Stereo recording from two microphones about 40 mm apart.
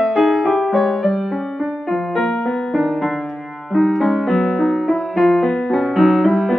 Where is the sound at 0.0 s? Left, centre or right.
Centre.